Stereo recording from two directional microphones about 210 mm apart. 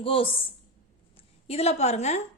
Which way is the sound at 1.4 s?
30° left (ahead or behind).